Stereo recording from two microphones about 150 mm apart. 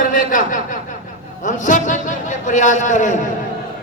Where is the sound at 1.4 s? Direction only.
60° left (ahead or behind).